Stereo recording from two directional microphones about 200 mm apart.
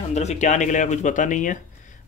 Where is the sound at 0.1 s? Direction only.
35° left (ahead or behind).